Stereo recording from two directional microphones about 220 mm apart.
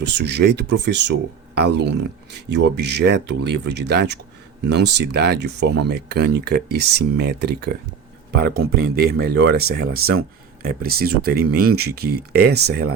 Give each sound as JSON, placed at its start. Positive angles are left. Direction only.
{"t": 0.0, "sound": "speech", "side_deg": -50}